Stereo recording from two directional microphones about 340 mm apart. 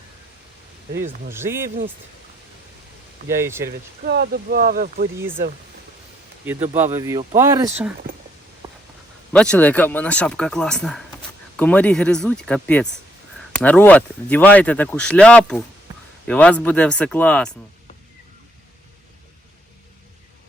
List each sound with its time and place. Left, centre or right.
1.3 s speech: centre
3.2 s speech: centre
3.7 s speech: right
6.4 s speech: centre
8.6 s a sound: centre
9.3 s speech: centre